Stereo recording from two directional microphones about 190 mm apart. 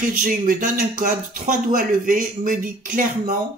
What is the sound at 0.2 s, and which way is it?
Speech, 45° right (ahead or behind).